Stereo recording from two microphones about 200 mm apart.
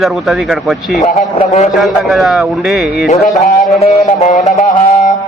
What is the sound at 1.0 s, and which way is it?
Speech, 35° left (ahead or behind).